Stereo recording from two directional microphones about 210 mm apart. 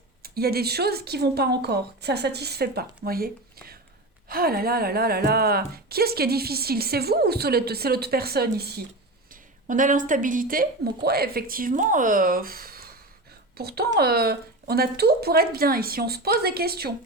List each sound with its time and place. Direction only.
0.2 s speech: 45° right (ahead or behind)
4.3 s speech: 45° right (ahead or behind)
9.3 s speech: 40° right (ahead or behind)